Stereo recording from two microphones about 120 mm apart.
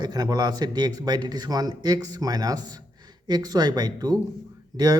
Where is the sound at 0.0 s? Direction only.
35° right (ahead or behind).